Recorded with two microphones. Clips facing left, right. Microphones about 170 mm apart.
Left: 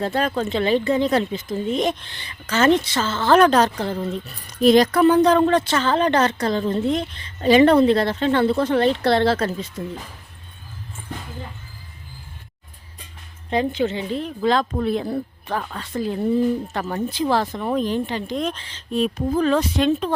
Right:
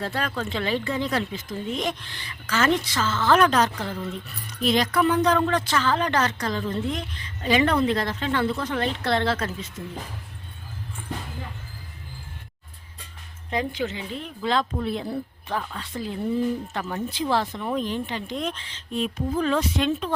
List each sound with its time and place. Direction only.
0.0 s speech: 20° left (ahead or behind)
13.5 s speech: 30° left (ahead or behind)